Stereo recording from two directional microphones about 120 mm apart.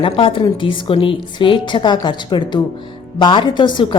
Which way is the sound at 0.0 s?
45° left (ahead or behind).